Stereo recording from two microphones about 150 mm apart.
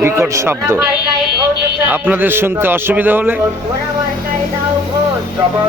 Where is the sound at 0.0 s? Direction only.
20° right (ahead or behind).